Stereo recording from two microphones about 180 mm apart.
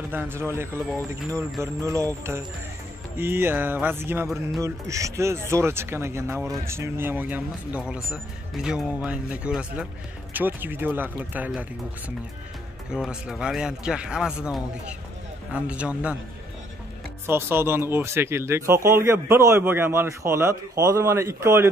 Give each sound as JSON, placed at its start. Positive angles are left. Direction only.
{"t": 0.1, "sound": "speech", "side_deg": -10}
{"t": 12.9, "sound": "speech", "side_deg": -5}
{"t": 17.3, "sound": "speech", "side_deg": -15}